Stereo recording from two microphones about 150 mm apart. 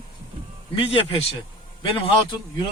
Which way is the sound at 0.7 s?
40° left (ahead or behind).